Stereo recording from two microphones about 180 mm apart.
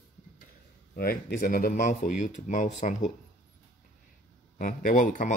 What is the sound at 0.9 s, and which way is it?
Speech, 55° left (ahead or behind).